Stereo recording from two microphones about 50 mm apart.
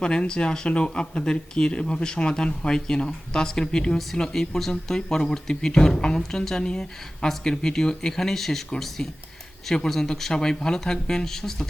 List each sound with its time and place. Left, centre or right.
0.0 s speech: centre
3.9 s speech: centre
9.0 s speech: centre